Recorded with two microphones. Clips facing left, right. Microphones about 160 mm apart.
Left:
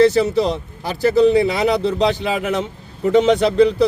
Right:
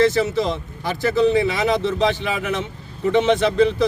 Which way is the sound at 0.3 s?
40° left (ahead or behind).